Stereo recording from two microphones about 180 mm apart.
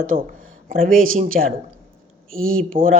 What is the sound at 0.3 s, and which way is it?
Speech, 50° right (ahead or behind).